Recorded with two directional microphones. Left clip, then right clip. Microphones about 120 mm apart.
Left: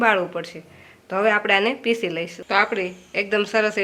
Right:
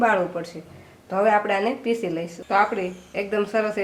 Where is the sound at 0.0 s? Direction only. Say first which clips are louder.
Left 1 dB; 30° left (ahead or behind).